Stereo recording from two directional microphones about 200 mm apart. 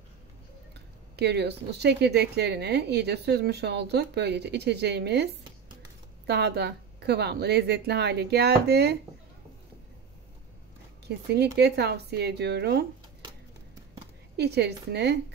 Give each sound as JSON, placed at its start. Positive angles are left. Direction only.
{"t": 1.1, "sound": "speech", "side_deg": -55}
{"t": 11.1, "sound": "speech", "side_deg": -55}
{"t": 14.3, "sound": "speech", "side_deg": -55}